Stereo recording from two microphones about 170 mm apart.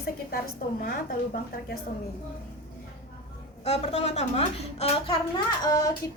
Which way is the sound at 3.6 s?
40° left (ahead or behind).